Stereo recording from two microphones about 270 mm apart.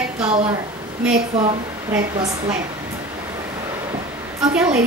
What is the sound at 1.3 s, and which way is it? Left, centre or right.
A woman's voice, centre.